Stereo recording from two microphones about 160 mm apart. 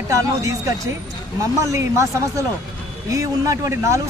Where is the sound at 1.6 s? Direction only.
20° right (ahead or behind).